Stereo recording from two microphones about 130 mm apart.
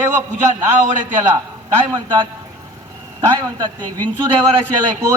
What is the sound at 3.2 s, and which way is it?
A man's voice, 30° right (ahead or behind).